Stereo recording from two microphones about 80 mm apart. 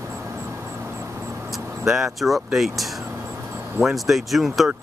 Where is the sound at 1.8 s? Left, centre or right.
Centre.